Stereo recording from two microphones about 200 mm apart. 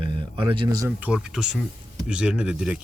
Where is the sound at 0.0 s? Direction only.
25° right (ahead or behind).